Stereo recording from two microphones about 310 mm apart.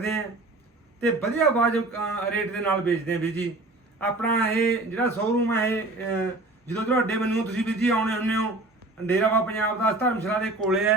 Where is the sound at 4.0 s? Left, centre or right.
Centre.